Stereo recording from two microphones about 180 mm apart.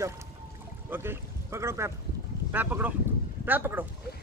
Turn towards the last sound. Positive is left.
turn(degrees=-10)  # may be behind; listen again after turning